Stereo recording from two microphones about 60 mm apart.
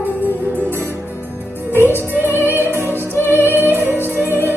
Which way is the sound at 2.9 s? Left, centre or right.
Left.